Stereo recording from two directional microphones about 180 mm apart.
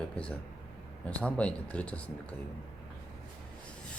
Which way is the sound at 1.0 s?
5° left (ahead or behind).